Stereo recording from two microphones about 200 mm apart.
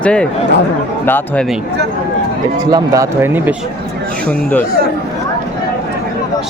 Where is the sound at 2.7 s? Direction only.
15° right (ahead or behind).